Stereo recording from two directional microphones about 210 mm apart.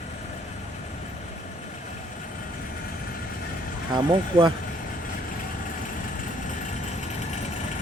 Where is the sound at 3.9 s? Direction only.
20° right (ahead or behind).